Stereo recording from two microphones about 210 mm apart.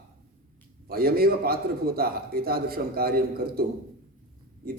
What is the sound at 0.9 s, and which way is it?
A man's voice, 45° right (ahead or behind).